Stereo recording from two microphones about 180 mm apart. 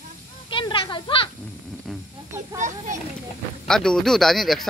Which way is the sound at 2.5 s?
45° right (ahead or behind).